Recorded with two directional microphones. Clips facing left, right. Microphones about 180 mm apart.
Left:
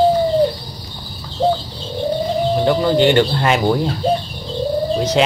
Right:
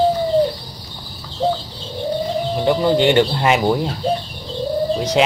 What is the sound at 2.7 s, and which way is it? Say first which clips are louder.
Speech: right 1 dB; 20° right (ahead or behind).